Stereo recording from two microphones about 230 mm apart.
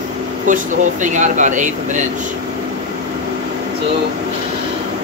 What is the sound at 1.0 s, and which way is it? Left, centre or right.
Speech, right.